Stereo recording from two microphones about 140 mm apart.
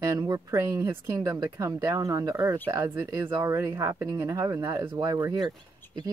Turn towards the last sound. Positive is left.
turn(degrees=-30)  # may be behind; listen again after turning